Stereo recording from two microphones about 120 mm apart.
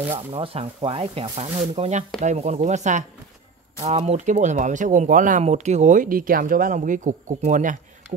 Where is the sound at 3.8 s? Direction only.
65° right (ahead or behind).